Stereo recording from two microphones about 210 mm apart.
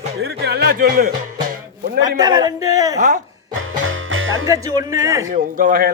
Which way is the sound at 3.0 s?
40° right (ahead or behind).